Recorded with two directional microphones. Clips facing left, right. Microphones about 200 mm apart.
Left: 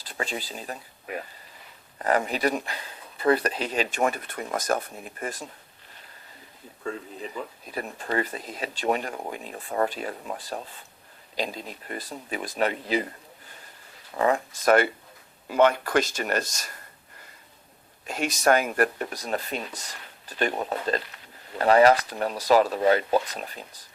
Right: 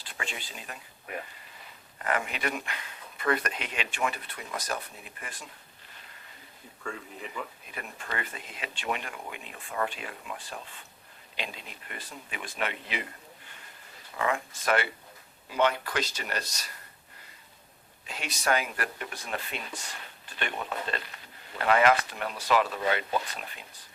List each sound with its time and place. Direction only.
0.0 s speech: 35° left (ahead or behind)
2.0 s speech: 35° left (ahead or behind)
6.8 s speech: 25° left (ahead or behind)
7.6 s speech: 35° left (ahead or behind)
14.2 s speech: 35° left (ahead or behind)
18.0 s speech: 45° left (ahead or behind)